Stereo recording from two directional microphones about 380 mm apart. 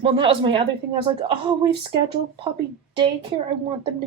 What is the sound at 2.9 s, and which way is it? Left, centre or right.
Speech, centre.